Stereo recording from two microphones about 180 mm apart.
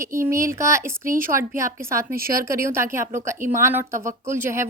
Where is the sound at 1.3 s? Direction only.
15° right (ahead or behind).